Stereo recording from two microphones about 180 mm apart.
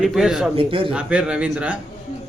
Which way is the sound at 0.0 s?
5° right (ahead or behind).